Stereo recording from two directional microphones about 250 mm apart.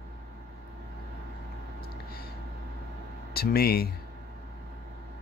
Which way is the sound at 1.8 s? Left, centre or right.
Left.